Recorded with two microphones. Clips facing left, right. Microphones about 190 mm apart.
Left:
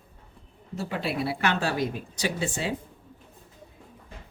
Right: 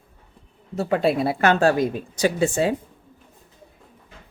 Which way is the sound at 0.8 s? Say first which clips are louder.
Right 9 dB; 50° right (ahead or behind).